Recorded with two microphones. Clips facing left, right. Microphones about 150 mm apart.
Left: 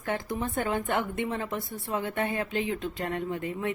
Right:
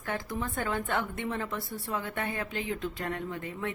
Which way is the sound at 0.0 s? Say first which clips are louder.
Left 3 dB; 20° left (ahead or behind).